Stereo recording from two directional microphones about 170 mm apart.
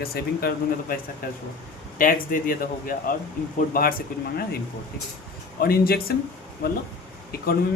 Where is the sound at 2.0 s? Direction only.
55° left (ahead or behind).